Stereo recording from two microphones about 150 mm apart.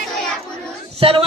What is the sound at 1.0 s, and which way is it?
Speech, 40° right (ahead or behind).